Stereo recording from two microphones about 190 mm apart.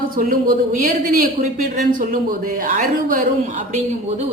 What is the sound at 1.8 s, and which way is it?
A man's voice, 45° right (ahead or behind).